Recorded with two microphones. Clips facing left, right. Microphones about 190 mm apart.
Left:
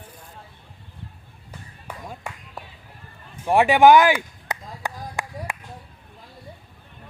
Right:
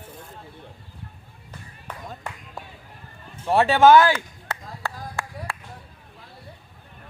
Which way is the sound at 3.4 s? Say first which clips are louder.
Left 1 dB; 15° left (ahead or behind).